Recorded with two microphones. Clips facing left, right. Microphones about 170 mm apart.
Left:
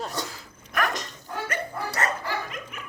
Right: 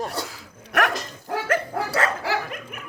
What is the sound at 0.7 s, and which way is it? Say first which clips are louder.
Dog: right 4 dB; 75° right (ahead or behind).